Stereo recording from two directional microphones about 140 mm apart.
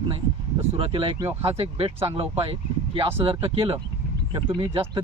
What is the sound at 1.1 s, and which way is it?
Speech, 20° right (ahead or behind).